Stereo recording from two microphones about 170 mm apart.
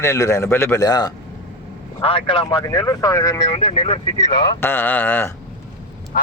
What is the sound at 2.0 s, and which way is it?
Speech, 30° left (ahead or behind).